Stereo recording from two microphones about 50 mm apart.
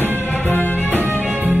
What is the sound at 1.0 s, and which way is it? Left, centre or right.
Music, right.